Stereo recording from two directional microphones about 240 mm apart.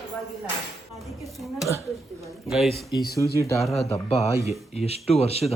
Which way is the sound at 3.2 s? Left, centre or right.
Centre.